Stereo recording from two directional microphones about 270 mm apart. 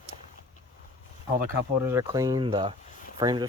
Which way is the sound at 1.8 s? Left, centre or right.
Centre.